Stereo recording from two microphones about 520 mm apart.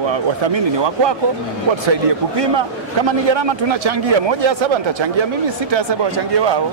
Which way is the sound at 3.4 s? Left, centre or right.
Right.